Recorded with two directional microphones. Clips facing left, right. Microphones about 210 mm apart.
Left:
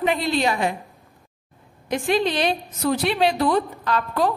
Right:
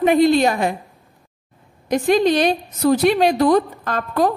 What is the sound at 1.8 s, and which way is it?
A woman's voice, 40° right (ahead or behind).